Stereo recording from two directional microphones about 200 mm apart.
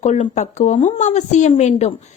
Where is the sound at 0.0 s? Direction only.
35° left (ahead or behind).